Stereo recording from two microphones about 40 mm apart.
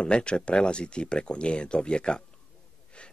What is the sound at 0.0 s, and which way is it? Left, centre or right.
Speech, left.